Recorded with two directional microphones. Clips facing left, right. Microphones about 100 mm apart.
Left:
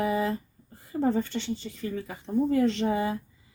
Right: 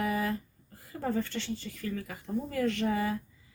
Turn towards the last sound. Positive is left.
turn(degrees=25)  # may be behind; listen again after turning